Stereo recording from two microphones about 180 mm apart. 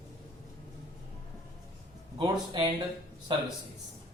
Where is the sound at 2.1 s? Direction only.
25° right (ahead or behind).